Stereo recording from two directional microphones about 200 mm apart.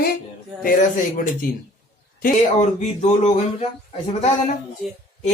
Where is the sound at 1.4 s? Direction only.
45° left (ahead or behind).